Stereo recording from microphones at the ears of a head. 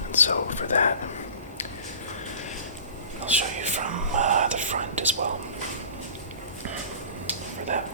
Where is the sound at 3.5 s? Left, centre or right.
Right.